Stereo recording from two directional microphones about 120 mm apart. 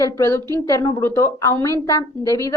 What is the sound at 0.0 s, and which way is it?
Speech, 25° left (ahead or behind).